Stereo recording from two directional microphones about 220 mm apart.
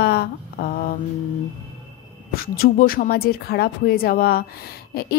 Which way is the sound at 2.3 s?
40° left (ahead or behind).